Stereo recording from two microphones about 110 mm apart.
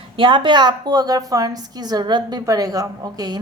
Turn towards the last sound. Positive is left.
turn(degrees=-35)  # may be behind; listen again after turning